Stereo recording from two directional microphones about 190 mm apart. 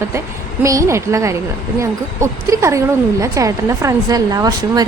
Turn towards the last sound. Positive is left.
turn(degrees=-20)  # may be behind; listen again after turning